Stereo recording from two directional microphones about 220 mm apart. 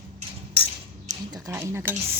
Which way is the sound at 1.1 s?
15° right (ahead or behind).